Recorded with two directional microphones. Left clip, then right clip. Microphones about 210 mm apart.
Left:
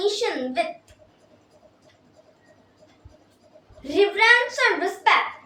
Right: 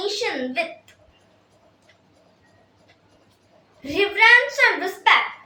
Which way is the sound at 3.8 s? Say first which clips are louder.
Right 2 dB; 15° left (ahead or behind).